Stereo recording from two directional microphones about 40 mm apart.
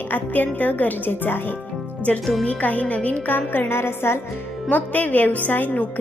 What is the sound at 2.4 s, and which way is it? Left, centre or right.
Speech, left.